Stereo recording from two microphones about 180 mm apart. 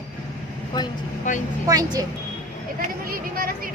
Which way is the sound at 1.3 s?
45° left (ahead or behind).